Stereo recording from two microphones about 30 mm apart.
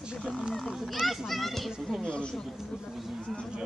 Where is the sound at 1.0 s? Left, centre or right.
Centre.